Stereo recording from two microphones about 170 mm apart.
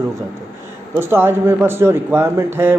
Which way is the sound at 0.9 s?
15° right (ahead or behind).